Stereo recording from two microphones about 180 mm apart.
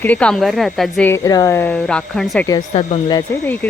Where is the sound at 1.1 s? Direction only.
20° left (ahead or behind); by 2.5 s centre (ahead or behind).